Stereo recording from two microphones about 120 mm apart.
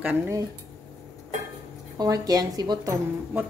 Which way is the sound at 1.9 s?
30° right (ahead or behind).